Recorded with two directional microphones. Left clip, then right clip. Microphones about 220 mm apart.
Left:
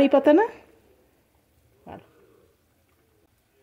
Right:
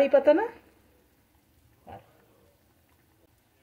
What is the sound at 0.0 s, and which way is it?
Speech, 40° left (ahead or behind).